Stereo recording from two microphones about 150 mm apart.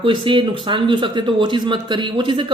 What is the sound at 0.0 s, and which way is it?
Speech, 35° right (ahead or behind).